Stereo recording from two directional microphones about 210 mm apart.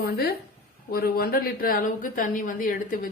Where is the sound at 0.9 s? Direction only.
45° left (ahead or behind).